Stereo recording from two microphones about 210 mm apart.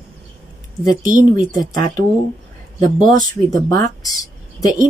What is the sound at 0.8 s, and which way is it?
Speech, 40° right (ahead or behind).